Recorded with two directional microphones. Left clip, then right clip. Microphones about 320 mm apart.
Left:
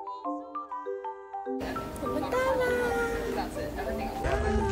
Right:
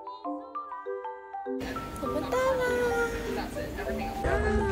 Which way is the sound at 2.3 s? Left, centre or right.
Centre.